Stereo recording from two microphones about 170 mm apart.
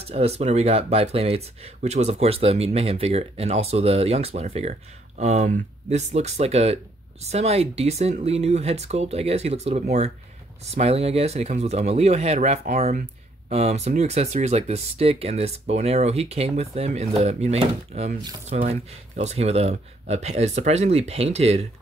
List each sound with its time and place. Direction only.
0.0 s speech: 35° right (ahead or behind)